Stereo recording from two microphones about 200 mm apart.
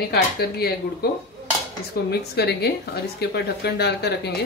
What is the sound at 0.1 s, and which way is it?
Speech, 50° left (ahead or behind).